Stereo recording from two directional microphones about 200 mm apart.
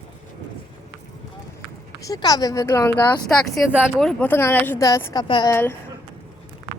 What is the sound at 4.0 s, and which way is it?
Speech, 5° left (ahead or behind).